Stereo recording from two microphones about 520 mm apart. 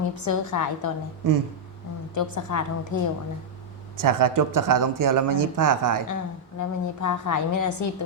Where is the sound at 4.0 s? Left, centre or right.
Right.